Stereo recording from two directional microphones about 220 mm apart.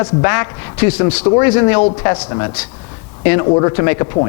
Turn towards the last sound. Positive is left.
turn(degrees=20)  # may be behind; listen again after turning